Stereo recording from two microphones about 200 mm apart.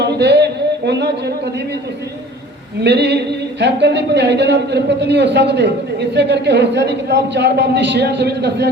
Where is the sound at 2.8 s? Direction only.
60° right (ahead or behind).